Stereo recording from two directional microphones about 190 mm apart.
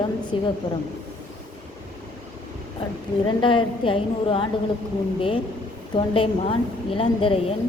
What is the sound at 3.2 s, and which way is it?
A woman's voice, 25° left (ahead or behind).